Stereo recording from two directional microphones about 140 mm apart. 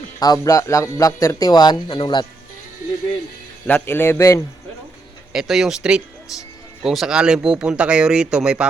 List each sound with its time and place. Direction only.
0.2 s speech: 25° left (ahead or behind)
3.7 s a man's voice: 15° left (ahead or behind)
5.3 s speech: centre (ahead or behind)